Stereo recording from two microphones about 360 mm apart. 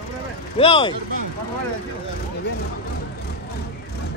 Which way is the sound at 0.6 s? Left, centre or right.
Centre.